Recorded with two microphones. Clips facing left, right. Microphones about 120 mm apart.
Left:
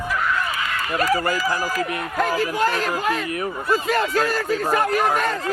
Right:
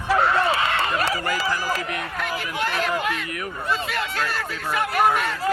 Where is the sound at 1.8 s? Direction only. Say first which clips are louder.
Left 5 dB; 40° left (ahead or behind).